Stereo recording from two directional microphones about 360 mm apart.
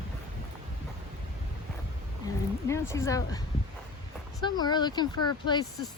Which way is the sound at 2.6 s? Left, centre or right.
Centre.